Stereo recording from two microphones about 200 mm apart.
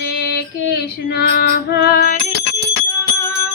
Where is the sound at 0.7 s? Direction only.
55° left (ahead or behind).